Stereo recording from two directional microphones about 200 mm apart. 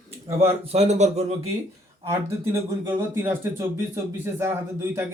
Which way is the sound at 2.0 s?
15° right (ahead or behind).